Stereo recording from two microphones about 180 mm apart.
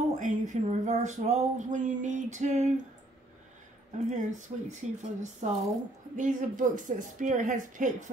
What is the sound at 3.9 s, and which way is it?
Speech, 40° right (ahead or behind).